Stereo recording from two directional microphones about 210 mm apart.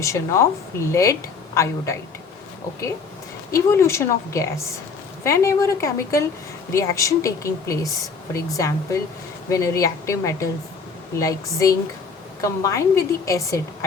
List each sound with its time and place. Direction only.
0.0 s speech: 15° left (ahead or behind)
3.5 s speech: 15° left (ahead or behind)